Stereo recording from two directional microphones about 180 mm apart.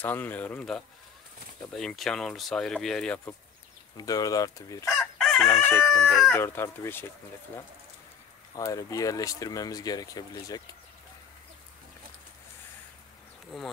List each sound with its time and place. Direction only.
0.0 s chicken: 10° left (ahead or behind)
1.7 s speech: centre (ahead or behind)
3.9 s speech: 20° left (ahead or behind)
4.9 s chicken: centre (ahead or behind)
5.4 s chicken: 15° left (ahead or behind)
6.3 s chicken: 15° left (ahead or behind)
8.5 s speech: 20° left (ahead or behind)